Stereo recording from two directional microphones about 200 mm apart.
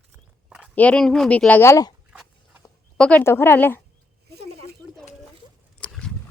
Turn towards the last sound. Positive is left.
turn(degrees=5)  # may be behind; listen again after turning